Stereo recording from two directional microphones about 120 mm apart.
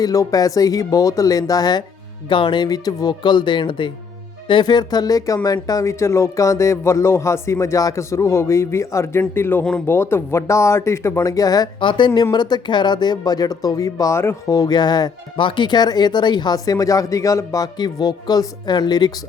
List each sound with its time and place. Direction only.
0.0 s speech: 30° left (ahead or behind)
11.8 s speech: 40° left (ahead or behind)